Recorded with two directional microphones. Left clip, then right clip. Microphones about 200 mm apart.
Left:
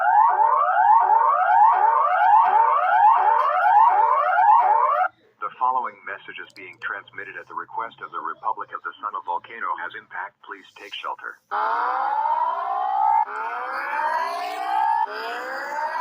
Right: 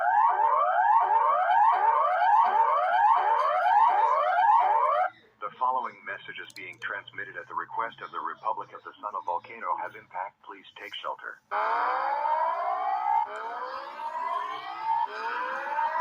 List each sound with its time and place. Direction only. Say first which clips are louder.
0.0 s music: left 6 dB; 30° left (ahead or behind)
6.8 s speech: left 5 dB; 30° left (ahead or behind)
7.8 s speech: left 5 dB; 40° left (ahead or behind)
9.0 s speech: left 2 dB; 20° left (ahead or behind)
11.0 s civil defense siren: left 5 dB; 25° left (ahead or behind)
14.0 s siren: left 5 dB; 25° left (ahead or behind)